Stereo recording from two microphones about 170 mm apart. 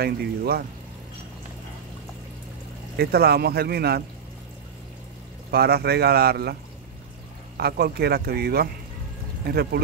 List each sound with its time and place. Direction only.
0.0 s speech: 65° right (ahead or behind)
3.0 s speech: 70° right (ahead or behind)
5.5 s speech: 65° right (ahead or behind)